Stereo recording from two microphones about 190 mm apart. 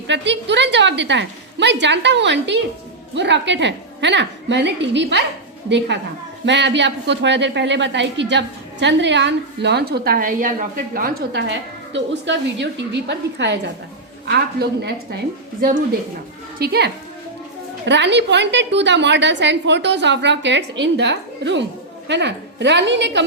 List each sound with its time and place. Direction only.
0.1 s a woman's voice: 65° right (ahead or behind)